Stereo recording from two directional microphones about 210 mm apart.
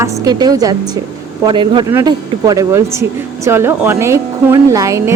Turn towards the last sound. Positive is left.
turn(degrees=-15)  # may be behind; listen again after turning